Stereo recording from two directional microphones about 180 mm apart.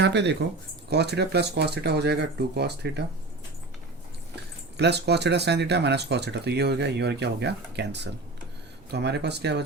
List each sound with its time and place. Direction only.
0.0 s speech: 70° right (ahead or behind)
4.8 s speech: 70° right (ahead or behind)